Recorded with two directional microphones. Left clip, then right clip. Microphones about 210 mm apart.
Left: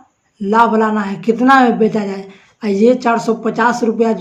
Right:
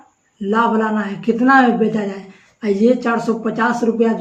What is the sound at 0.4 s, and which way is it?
A woman's voice, 35° left (ahead or behind).